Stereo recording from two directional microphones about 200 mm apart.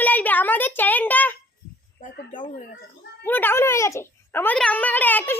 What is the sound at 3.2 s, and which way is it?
Speech, 10° left (ahead or behind).